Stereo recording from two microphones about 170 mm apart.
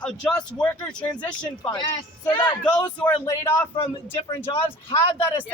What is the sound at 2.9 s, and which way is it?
Speech, 10° left (ahead or behind).